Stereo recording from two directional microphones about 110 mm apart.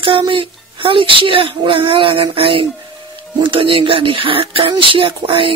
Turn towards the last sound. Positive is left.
turn(degrees=-55)  # may be behind; listen again after turning